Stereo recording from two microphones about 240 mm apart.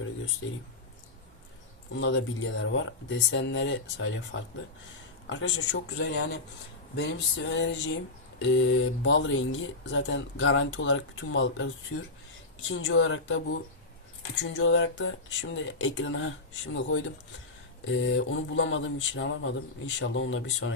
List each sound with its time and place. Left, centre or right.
2.0 s speech: left
14.4 s speech: left